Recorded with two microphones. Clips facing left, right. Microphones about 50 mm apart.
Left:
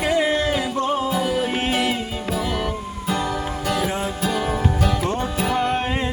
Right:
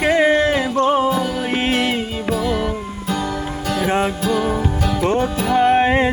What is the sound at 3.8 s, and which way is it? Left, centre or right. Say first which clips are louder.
Music: right 6 dB; right.